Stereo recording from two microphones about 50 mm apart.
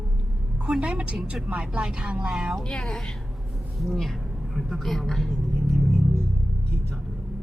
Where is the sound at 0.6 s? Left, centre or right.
Centre.